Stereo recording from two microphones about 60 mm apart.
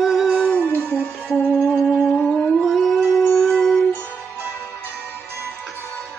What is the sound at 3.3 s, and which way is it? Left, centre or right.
Music, centre.